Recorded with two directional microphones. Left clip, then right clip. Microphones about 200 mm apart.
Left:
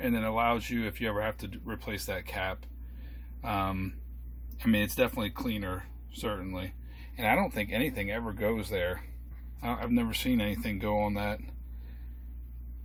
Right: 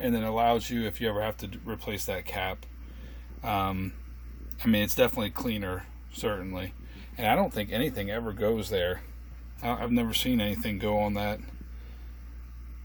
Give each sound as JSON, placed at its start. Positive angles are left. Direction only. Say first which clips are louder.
{"t": 0.0, "sound": "speech", "louder": "right 3 dB", "side_deg": -15}